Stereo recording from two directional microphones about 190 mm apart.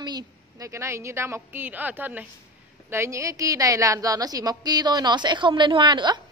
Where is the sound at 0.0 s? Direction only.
20° right (ahead or behind).